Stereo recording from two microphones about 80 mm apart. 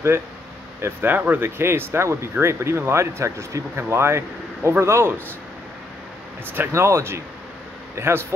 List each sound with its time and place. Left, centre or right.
0.7 s speech: right
6.4 s speech: right